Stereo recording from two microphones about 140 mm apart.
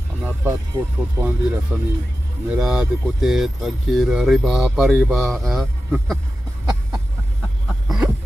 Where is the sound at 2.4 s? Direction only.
5° right (ahead or behind).